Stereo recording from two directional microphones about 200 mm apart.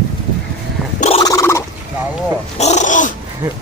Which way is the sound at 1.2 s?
15° left (ahead or behind).